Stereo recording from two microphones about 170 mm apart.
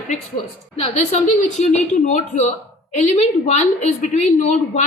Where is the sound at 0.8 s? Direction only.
40° left (ahead or behind).